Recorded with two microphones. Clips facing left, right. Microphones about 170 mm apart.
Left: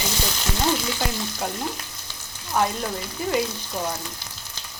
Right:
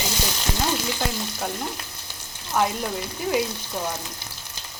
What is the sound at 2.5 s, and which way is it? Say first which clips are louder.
Speech: even; 5° right (ahead or behind).